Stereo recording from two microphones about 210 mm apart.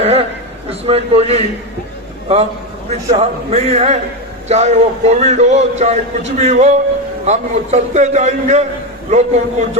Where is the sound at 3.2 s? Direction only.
30° right (ahead or behind).